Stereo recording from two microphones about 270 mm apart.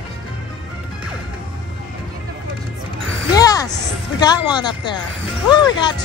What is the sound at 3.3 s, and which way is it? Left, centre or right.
Music, centre.